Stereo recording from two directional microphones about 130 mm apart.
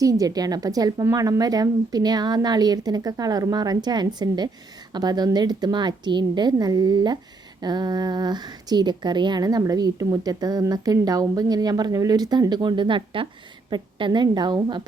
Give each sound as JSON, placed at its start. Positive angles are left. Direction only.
{"t": 0.0, "sound": "a woman's voice", "side_deg": -25}